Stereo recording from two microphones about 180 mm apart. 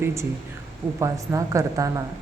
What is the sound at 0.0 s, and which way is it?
A woman's voice, 15° right (ahead or behind).